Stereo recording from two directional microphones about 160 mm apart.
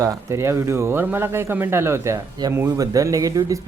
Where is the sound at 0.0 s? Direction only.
20° right (ahead or behind).